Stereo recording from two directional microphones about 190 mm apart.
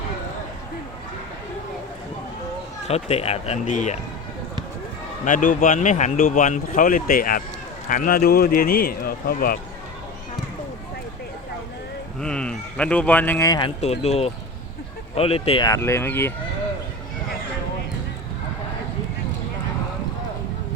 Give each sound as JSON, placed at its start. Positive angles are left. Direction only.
{"t": 2.8, "sound": "speech", "side_deg": 35}
{"t": 5.2, "sound": "a man's voice", "side_deg": 45}
{"t": 12.2, "sound": "speech", "side_deg": 5}
{"t": 13.8, "sound": "speech", "side_deg": 35}